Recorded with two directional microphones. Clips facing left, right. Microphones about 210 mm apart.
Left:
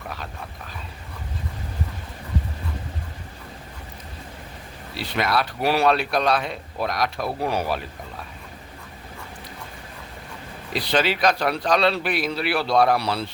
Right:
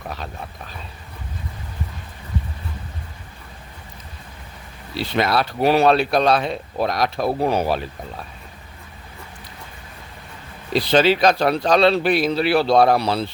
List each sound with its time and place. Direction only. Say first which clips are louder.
4.9 s a man's voice: right 4 dB; 30° right (ahead or behind)
10.7 s a man's voice: right 6 dB; 25° right (ahead or behind)